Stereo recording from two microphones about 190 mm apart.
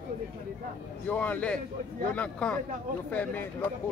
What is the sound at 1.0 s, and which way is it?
A man's voice, 10° left (ahead or behind).